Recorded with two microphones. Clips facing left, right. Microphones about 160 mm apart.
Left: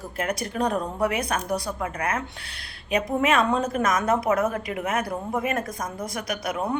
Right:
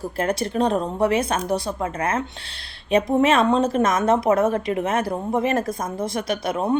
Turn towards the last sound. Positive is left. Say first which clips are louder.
# right 5 dB
turn(degrees=-25)  # may be behind; listen again after turning